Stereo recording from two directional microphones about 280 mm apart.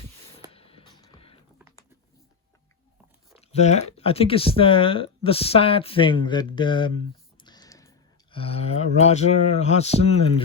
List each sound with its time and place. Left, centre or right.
0.5 s music: centre
3.5 s speech: left